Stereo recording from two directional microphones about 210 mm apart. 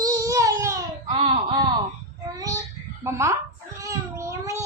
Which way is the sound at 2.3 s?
15° right (ahead or behind).